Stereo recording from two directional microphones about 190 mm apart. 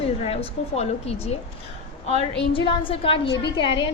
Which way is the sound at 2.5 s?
30° left (ahead or behind).